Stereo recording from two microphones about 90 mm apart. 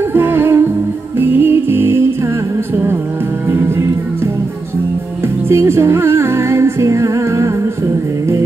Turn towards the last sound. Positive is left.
turn(degrees=-35)  # may be behind; listen again after turning